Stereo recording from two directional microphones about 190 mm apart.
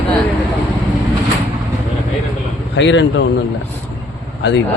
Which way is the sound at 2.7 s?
70° left (ahead or behind).